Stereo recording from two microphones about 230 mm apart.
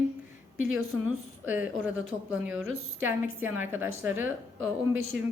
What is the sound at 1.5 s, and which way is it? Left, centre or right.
A woman's voice, centre.